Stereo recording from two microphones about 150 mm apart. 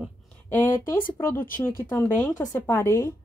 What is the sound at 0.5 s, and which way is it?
Speech, 15° left (ahead or behind).